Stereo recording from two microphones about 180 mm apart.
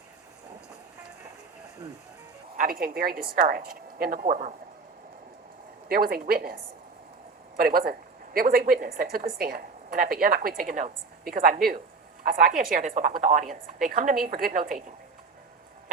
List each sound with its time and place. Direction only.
2.6 s a woman's voice: 55° right (ahead or behind)
5.9 s a woman's voice: 55° right (ahead or behind)